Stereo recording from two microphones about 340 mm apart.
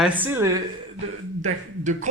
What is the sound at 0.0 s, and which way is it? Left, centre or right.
Speech, centre.